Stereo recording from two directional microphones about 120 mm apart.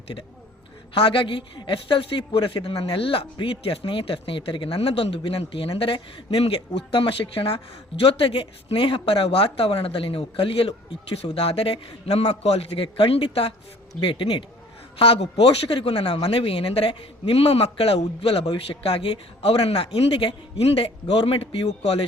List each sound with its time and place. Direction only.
0.9 s speech: 45° left (ahead or behind)